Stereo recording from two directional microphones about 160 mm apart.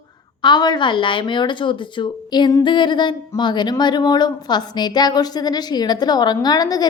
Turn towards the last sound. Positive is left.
turn(degrees=25)  # may be behind; listen again after turning